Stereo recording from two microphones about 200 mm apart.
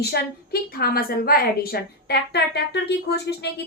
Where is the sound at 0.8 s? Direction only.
50° left (ahead or behind).